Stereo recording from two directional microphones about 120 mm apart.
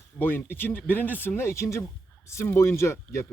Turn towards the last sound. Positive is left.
turn(degrees=25)  # may be behind; listen again after turning